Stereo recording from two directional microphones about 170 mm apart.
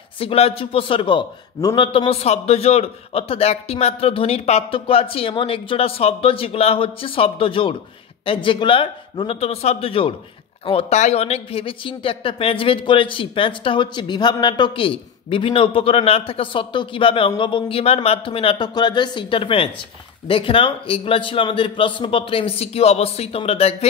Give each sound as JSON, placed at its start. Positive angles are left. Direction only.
{"t": 0.2, "sound": "a man's voice", "side_deg": 35}